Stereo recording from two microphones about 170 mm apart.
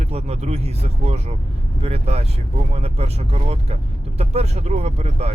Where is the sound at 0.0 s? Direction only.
40° right (ahead or behind).